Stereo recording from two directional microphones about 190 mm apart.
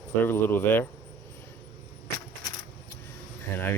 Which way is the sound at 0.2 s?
10° left (ahead or behind).